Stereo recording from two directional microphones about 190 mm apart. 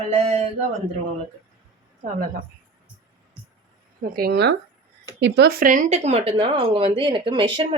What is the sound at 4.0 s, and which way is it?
Speech, 50° right (ahead or behind).